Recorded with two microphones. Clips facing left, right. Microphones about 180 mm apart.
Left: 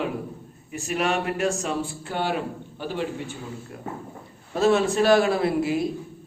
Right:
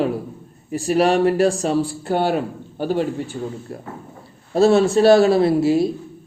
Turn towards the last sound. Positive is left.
turn(degrees=-30)  # may be behind; listen again after turning